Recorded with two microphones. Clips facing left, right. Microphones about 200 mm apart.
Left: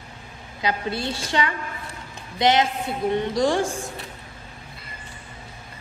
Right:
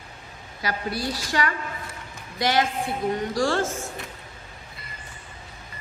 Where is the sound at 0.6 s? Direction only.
20° left (ahead or behind).